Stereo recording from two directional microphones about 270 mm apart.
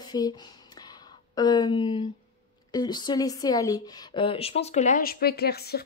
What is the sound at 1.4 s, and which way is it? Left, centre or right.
A woman's voice, centre.